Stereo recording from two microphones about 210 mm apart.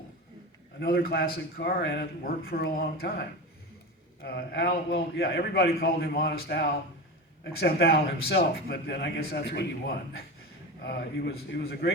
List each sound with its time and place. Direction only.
0.8 s a man's voice: 45° left (ahead or behind)